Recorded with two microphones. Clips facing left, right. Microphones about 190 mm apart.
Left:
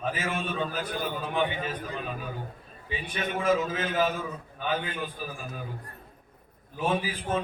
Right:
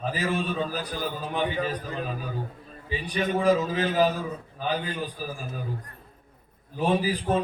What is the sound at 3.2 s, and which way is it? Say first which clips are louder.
A man's voice: right 4 dB; 35° right (ahead or behind).